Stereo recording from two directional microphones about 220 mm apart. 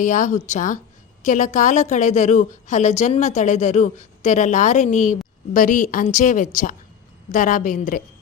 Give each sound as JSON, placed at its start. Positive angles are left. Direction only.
{"t": 0.0, "sound": "a woman's voice", "side_deg": 35}